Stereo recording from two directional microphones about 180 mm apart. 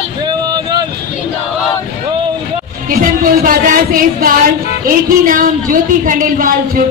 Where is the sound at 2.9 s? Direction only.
50° right (ahead or behind).